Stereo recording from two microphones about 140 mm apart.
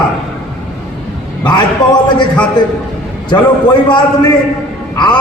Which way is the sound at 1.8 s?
30° left (ahead or behind).